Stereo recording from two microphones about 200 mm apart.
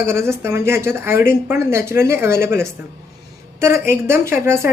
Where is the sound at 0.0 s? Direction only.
15° right (ahead or behind).